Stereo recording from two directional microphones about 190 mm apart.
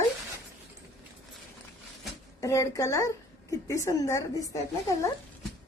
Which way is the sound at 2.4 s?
15° left (ahead or behind).